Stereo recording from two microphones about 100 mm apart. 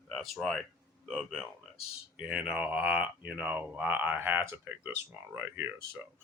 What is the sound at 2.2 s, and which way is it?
Speech, 10° right (ahead or behind).